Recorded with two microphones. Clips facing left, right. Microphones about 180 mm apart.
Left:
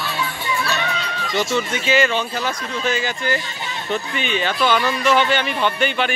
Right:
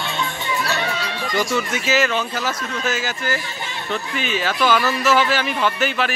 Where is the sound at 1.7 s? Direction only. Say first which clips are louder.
Left 2 dB; 5° right (ahead or behind).